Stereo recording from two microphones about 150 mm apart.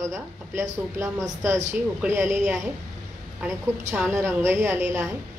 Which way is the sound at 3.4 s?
15° right (ahead or behind).